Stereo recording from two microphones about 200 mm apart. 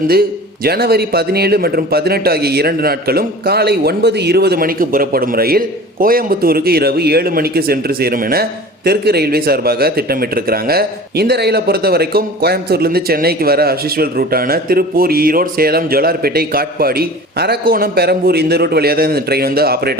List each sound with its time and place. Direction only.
0.1 s a man's voice: 50° right (ahead or behind)